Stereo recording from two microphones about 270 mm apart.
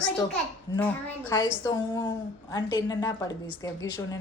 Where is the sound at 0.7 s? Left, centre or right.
Centre.